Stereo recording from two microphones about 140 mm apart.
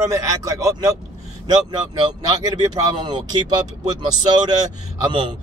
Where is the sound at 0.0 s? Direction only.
25° right (ahead or behind).